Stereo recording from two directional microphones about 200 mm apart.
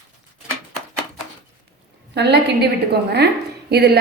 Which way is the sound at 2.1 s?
55° right (ahead or behind).